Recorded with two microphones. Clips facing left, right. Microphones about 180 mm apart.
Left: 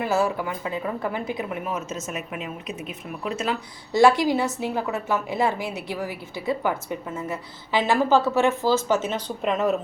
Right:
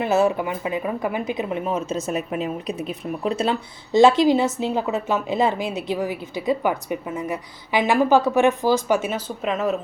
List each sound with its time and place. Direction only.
0.0 s a woman's voice: 20° right (ahead or behind); by 9.7 s centre (ahead or behind)